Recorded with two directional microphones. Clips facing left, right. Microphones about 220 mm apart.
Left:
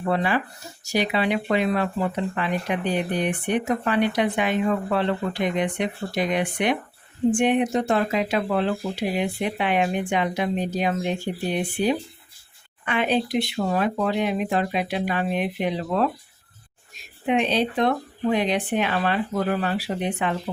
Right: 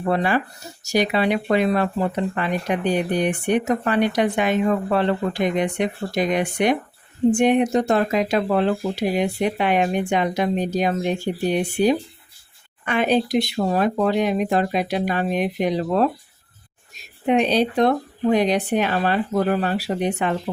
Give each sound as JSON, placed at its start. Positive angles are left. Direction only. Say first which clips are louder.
{"t": 0.1, "sound": "speech", "louder": "right 3 dB", "side_deg": -45}
{"t": 12.8, "sound": "speech", "louder": "right 3 dB", "side_deg": -45}
{"t": 17.2, "sound": "speech", "louder": "right 4 dB", "side_deg": -40}